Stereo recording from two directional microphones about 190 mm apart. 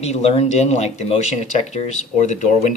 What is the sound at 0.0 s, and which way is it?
Speech, 35° left (ahead or behind).